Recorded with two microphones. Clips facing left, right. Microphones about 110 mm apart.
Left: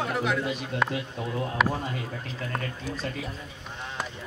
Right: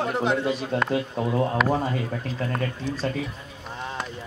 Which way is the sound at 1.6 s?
Centre (ahead or behind).